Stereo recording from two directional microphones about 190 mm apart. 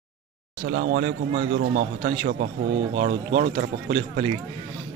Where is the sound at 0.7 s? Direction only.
55° right (ahead or behind).